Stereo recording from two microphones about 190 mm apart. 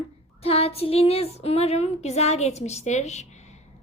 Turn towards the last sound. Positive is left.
turn(degrees=35)  # may be behind; listen again after turning